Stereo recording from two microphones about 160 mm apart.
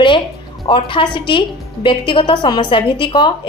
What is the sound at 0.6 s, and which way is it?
A woman's voice, 30° left (ahead or behind).